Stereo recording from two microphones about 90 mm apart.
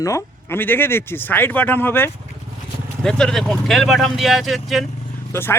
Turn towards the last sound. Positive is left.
turn(degrees=25)  # may be behind; listen again after turning